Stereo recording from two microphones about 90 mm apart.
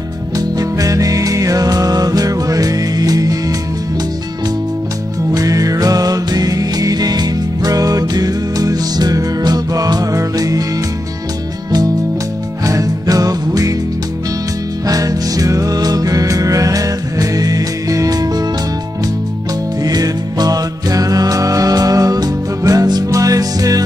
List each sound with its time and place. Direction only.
0.6 s music: 40° right (ahead or behind)
5.3 s music: 40° right (ahead or behind)
12.6 s music: 40° right (ahead or behind)
14.9 s music: 40° right (ahead or behind)
19.8 s music: 45° right (ahead or behind)